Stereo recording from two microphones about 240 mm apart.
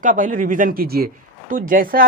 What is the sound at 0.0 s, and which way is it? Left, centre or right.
Speech, right.